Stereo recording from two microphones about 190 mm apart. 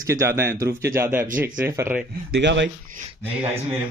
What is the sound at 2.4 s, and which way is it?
Speech, 65° right (ahead or behind).